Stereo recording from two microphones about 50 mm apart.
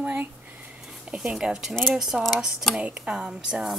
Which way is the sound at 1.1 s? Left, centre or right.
Centre.